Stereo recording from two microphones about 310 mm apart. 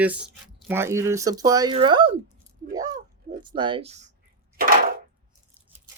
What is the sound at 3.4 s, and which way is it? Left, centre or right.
Speech, centre.